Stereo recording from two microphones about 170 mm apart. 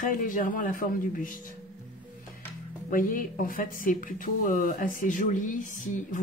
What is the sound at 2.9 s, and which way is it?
Speech, 50° left (ahead or behind).